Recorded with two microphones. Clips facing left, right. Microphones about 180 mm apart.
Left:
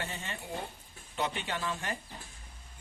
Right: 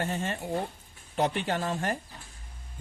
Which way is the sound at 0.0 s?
50° right (ahead or behind).